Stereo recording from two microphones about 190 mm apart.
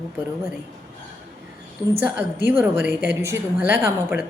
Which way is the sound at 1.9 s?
10° right (ahead or behind).